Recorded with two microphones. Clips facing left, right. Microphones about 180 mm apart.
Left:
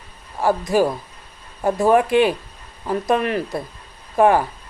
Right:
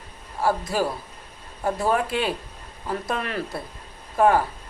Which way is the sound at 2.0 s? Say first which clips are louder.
Left 9 dB; 15° left (ahead or behind).